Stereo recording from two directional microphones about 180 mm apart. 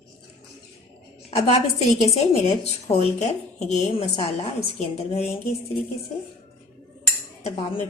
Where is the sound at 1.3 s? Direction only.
35° left (ahead or behind).